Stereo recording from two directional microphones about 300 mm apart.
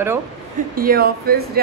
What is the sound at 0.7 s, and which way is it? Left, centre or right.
Speech, right.